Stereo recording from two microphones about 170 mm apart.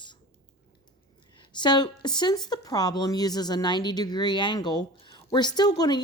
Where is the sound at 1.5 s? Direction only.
25° left (ahead or behind).